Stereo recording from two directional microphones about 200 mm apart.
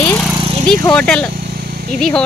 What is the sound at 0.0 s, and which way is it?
Lawn mower, 5° left (ahead or behind).